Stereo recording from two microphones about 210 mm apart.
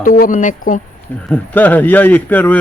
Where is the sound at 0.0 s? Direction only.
40° left (ahead or behind).